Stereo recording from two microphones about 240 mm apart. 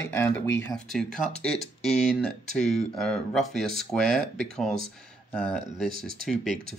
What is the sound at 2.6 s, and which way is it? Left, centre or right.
Speech, left.